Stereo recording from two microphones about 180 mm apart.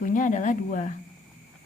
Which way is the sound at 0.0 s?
45° left (ahead or behind).